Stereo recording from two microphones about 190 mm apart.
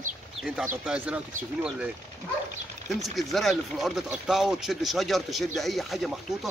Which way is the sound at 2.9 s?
Centre (ahead or behind).